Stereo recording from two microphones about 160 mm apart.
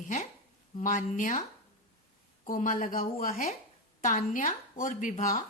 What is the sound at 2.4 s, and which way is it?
A woman's voice, 55° left (ahead or behind).